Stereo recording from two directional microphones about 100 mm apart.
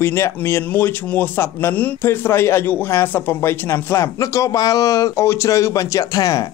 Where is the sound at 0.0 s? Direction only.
25° left (ahead or behind).